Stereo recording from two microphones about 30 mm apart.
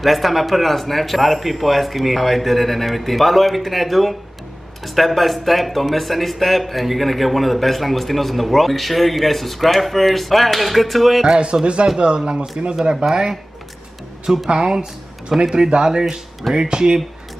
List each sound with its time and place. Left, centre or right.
0.0 s speech: centre
11.2 s a man's voice: right
14.3 s speech: centre
14.8 s speech: right